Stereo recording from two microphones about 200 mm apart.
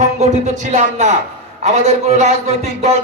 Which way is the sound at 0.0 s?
35° right (ahead or behind).